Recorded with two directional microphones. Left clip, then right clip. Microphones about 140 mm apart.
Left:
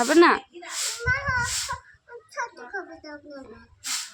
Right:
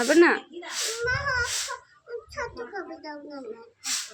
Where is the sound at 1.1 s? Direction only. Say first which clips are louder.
Left 3 dB; 35° left (ahead or behind).